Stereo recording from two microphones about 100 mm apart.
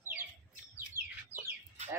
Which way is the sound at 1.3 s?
25° left (ahead or behind).